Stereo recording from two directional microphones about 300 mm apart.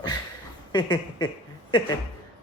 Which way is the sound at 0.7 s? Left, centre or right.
Centre.